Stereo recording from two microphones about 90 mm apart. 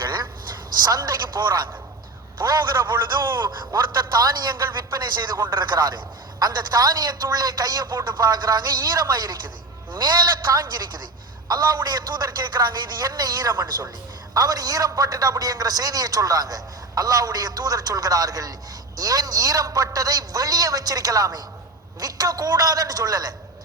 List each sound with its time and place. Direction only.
0.8 s a man's voice: 50° right (ahead or behind)
2.9 s a man's voice: 25° right (ahead or behind)
3.3 s a man's voice: 60° right (ahead or behind)